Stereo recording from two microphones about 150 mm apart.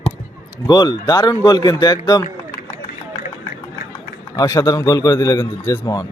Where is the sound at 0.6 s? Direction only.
30° left (ahead or behind).